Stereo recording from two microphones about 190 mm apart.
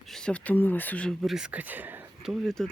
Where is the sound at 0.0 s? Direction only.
Centre (ahead or behind).